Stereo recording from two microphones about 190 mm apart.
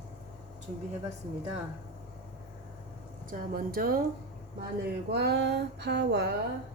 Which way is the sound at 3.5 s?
50° right (ahead or behind).